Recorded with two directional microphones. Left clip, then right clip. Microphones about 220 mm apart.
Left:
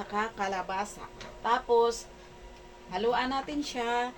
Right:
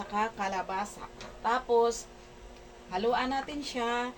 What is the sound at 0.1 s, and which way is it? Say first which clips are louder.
A woman's voice: even; 15° left (ahead or behind).